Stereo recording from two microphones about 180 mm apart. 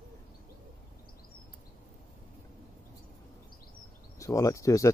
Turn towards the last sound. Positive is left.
turn(degrees=15)  # may be behind; listen again after turning